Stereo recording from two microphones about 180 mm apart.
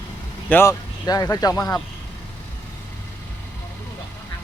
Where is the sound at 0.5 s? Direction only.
15° left (ahead or behind).